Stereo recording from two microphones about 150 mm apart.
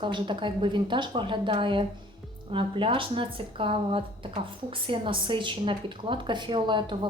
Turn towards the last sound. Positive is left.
turn(degrees=-30)  # may be behind; listen again after turning